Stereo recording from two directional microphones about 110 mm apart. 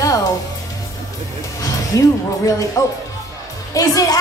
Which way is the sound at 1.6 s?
30° left (ahead or behind).